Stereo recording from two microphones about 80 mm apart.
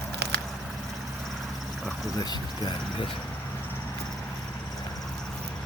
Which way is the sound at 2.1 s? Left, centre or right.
Left.